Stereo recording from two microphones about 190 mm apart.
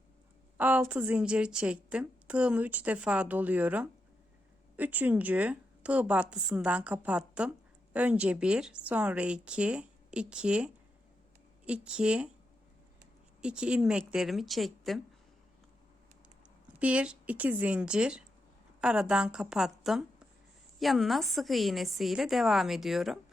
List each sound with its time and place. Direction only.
0.5 s a woman's voice: 10° right (ahead or behind)
13.4 s speech: 5° right (ahead or behind)
16.8 s a woman's voice: 5° right (ahead or behind)